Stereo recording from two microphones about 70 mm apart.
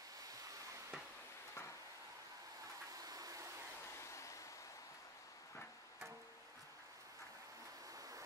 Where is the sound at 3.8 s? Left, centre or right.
Left.